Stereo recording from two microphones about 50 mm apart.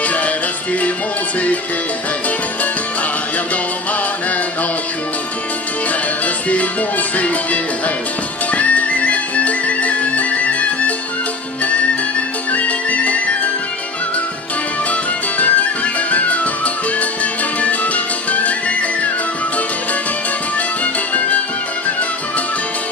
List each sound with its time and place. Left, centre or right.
0.0 s music: left
5.9 s music: left
12.5 s music: left
14.9 s music: left
20.5 s music: left